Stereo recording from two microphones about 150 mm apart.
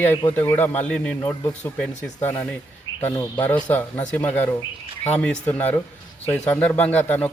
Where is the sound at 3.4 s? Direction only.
10° left (ahead or behind).